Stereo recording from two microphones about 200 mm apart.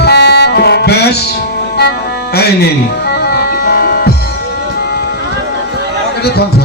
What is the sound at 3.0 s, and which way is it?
Music, 50° left (ahead or behind).